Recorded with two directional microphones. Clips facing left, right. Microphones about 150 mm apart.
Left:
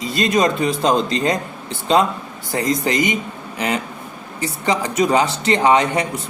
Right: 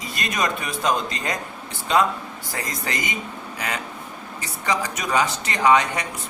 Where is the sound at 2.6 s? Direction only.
20° left (ahead or behind).